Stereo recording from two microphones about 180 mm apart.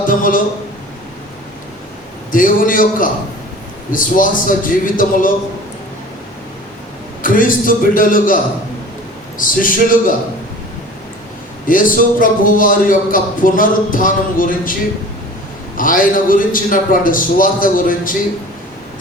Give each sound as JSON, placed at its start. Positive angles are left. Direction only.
{"t": 0.1, "sound": "a sound", "side_deg": 50}
{"t": 2.3, "sound": "a man's voice", "side_deg": 50}
{"t": 7.2, "sound": "a man's voice", "side_deg": 50}
{"t": 9.4, "sound": "a man's voice", "side_deg": 50}
{"t": 11.7, "sound": "a man's voice", "side_deg": 50}
{"t": 15.8, "sound": "a man's voice", "side_deg": 50}